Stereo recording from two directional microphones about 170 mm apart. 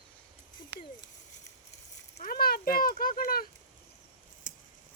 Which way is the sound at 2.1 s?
60° left (ahead or behind).